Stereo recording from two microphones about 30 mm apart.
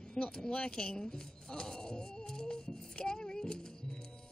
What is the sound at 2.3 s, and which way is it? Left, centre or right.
Music, left.